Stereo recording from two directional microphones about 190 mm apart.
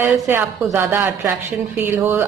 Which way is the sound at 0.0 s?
10° right (ahead or behind).